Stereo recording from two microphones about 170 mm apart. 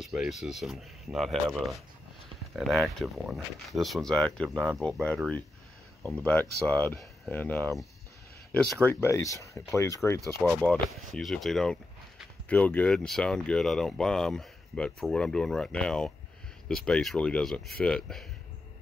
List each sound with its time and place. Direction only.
0.0 s speech: 5° right (ahead or behind); by 10.2 s 15° left (ahead or behind)
10.4 s speech: 5° left (ahead or behind)